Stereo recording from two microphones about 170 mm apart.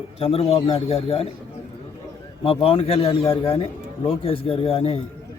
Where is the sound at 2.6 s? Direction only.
35° left (ahead or behind).